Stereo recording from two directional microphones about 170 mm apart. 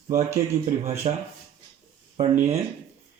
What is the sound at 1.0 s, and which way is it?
Speech, 35° right (ahead or behind).